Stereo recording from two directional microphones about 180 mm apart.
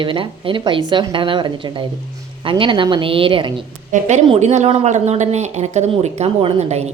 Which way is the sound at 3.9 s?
40° right (ahead or behind).